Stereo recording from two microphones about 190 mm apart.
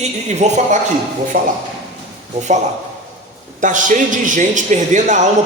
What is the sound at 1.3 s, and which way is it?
Speech, 50° right (ahead or behind).